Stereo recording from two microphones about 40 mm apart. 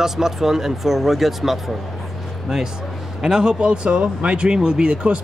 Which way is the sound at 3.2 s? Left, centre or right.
Centre.